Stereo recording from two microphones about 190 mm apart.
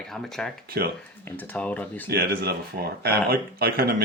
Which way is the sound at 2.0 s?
55° right (ahead or behind).